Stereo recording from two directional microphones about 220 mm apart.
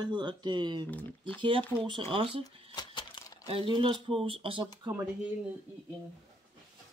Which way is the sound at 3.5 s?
25° right (ahead or behind).